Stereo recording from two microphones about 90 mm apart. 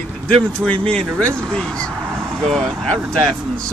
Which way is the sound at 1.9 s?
25° right (ahead or behind).